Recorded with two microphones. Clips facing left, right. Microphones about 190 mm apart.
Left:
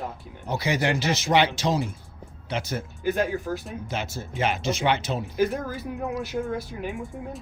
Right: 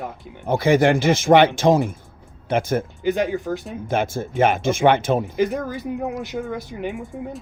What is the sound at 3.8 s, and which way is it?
Speech, 50° right (ahead or behind).